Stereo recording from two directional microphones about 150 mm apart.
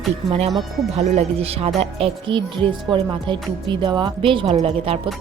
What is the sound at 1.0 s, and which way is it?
Speech, 45° right (ahead or behind).